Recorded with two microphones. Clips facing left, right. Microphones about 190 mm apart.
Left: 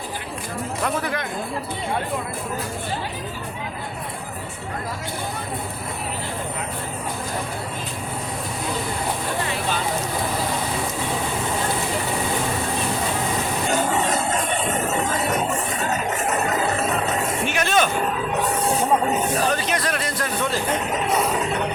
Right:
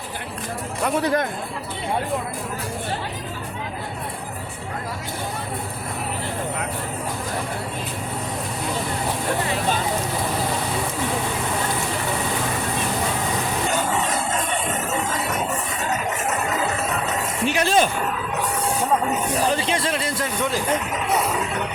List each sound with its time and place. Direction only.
1.0 s speech: 40° right (ahead or behind)
17.4 s speech: 30° right (ahead or behind)
19.5 s speech: 25° right (ahead or behind)